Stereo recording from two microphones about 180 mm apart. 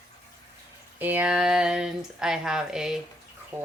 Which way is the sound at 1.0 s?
10° right (ahead or behind).